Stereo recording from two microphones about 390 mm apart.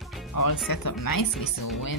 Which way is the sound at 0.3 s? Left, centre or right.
Left.